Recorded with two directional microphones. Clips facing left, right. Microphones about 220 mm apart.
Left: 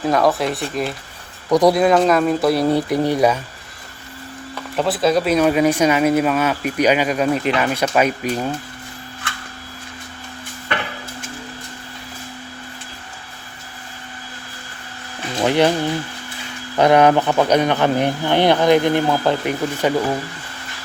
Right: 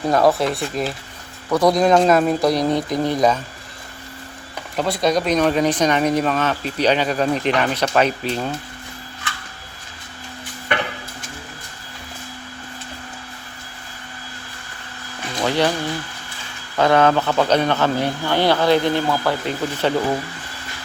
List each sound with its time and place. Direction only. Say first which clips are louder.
0.2 s speech: right 1 dB; centre (ahead or behind)
1.5 s speech: left 3 dB; 15° left (ahead or behind)
1.7 s speech: even; 5° left (ahead or behind)
4.9 s speech: left 2 dB; 5° left (ahead or behind)
15.4 s speech: left 4 dB; 20° left (ahead or behind)
16.7 s speech: left 3 dB; 20° left (ahead or behind)